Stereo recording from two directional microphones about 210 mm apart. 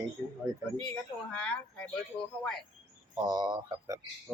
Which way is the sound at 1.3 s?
5° left (ahead or behind).